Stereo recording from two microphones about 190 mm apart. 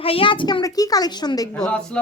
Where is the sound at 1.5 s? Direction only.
5° left (ahead or behind).